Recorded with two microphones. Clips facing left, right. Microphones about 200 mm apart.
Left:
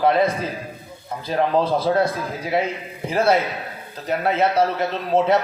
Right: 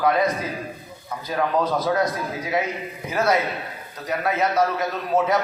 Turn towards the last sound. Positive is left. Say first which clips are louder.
# left 3 dB
turn(degrees=30)  # may be behind; listen again after turning